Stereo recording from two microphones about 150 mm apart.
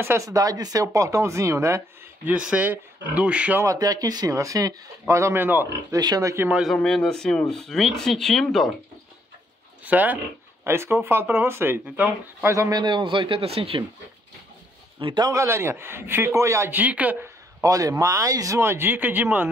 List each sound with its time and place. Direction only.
0.0 s a man's voice: 20° right (ahead or behind)
3.6 s speech: 25° right (ahead or behind)
5.9 s speech: 25° right (ahead or behind)
6.5 s speech: centre (ahead or behind)
9.8 s a man's voice: 10° right (ahead or behind)
12.5 s speech: 25° right (ahead or behind)
15.0 s a man's voice: 30° right (ahead or behind); by 19.5 s 15° right (ahead or behind)